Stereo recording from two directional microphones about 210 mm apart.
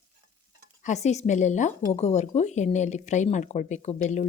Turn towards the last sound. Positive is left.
turn(degrees=35)  # may be behind; listen again after turning